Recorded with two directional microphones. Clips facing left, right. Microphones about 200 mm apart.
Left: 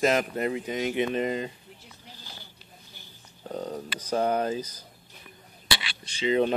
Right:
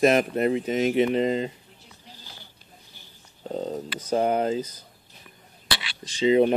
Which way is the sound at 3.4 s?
25° right (ahead or behind).